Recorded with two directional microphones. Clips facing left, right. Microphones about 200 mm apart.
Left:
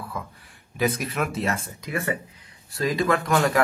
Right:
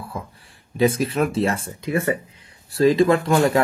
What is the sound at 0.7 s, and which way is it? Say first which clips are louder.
Speech: right 6 dB; 30° right (ahead or behind).